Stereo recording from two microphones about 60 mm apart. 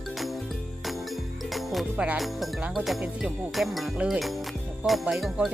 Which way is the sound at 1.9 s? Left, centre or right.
Right.